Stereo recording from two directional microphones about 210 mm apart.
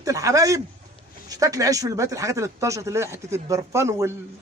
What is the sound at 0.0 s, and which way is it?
Speech, 15° right (ahead or behind).